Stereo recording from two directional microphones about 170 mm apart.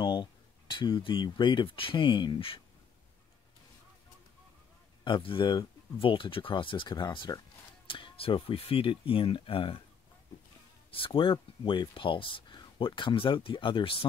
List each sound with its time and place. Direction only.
0.0 s speech: 30° left (ahead or behind)
5.0 s speech: 30° left (ahead or behind)
10.9 s speech: 30° left (ahead or behind)